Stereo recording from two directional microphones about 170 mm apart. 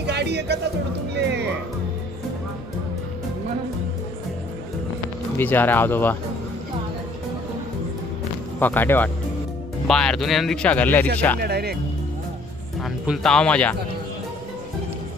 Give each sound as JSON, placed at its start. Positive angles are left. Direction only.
{"t": 0.0, "sound": "music", "side_deg": -80}
{"t": 5.4, "sound": "speech", "side_deg": 10}
{"t": 8.5, "sound": "speech", "side_deg": 10}
{"t": 11.3, "sound": "speech", "side_deg": -70}
{"t": 12.8, "sound": "speech", "side_deg": 0}